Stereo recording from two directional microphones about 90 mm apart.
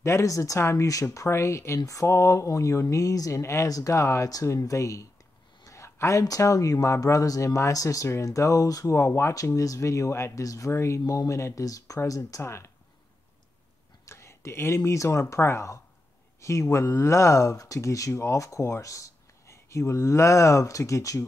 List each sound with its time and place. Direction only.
0.0 s speech: 35° left (ahead or behind)
14.0 s speech: 30° left (ahead or behind)